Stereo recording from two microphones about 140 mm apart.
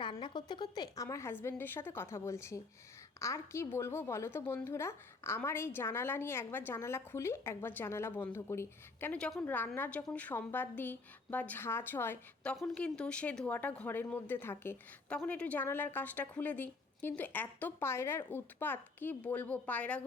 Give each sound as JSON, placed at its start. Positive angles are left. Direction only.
{"t": 0.2, "sound": "a woman's voice", "side_deg": 30}